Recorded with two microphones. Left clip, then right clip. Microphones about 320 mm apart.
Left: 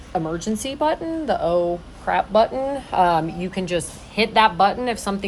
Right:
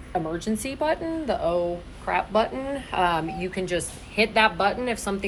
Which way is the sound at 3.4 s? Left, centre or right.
Left.